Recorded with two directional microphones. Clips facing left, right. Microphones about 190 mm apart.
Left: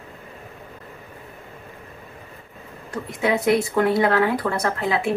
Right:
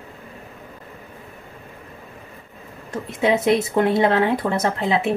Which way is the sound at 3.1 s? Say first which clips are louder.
Right 2 dB; 25° right (ahead or behind).